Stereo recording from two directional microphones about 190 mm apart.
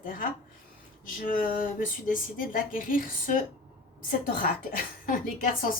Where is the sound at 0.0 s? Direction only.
45° left (ahead or behind).